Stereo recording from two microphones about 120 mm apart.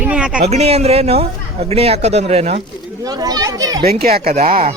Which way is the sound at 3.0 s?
35° right (ahead or behind).